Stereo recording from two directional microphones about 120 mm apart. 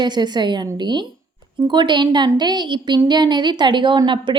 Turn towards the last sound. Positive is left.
turn(degrees=-45)  # may be behind; listen again after turning